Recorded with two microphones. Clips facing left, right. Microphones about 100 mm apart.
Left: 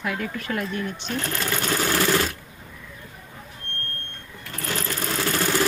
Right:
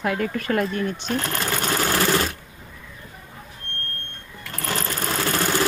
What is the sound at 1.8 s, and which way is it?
Sewing machine, 35° right (ahead or behind).